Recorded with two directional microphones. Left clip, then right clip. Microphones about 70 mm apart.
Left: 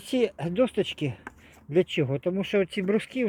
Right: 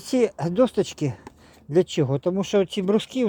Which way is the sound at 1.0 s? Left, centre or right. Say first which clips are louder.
Right 4 dB; centre.